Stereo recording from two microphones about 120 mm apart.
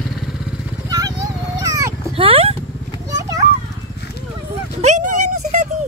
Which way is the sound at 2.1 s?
50° right (ahead or behind).